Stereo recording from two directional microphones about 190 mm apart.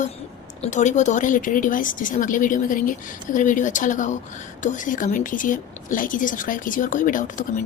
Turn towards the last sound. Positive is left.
turn(degrees=45)  # may be behind; listen again after turning